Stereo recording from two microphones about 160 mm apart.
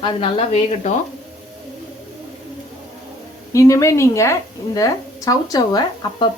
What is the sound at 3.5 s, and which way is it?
A woman's voice, 20° left (ahead or behind).